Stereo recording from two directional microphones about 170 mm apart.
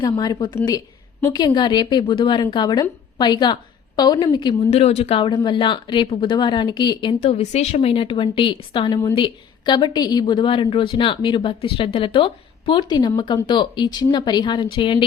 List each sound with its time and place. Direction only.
0.0 s a woman's voice: 20° left (ahead or behind)